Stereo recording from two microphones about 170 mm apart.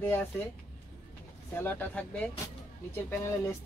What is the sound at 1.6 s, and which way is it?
Speech, 10° left (ahead or behind).